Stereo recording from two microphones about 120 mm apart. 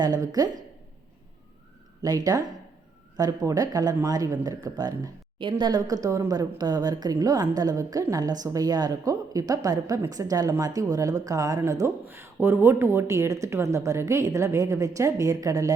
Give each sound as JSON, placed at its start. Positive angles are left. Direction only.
{"t": 0.0, "sound": "a woman's voice", "side_deg": -30}
{"t": 2.0, "sound": "a woman's voice", "side_deg": -30}